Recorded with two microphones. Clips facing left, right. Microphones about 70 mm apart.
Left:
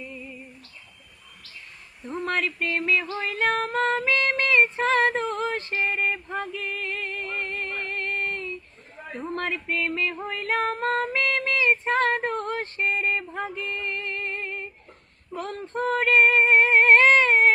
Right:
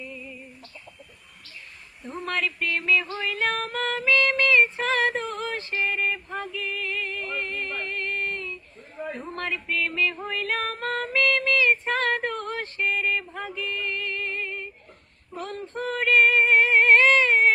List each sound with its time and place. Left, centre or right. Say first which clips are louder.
2.2 s a sound: left 1 dB; left
3.2 s female singing: left 2 dB; left
9.7 s music: right 3 dB; left
15.3 s female singing: left 2 dB; left